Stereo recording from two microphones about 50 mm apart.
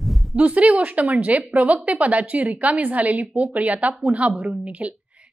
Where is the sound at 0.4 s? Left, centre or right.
Right.